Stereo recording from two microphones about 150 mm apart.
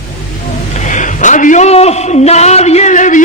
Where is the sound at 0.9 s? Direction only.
55° left (ahead or behind).